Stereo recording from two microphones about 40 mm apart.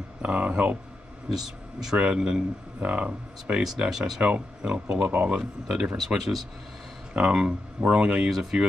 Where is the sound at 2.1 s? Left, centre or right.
Centre.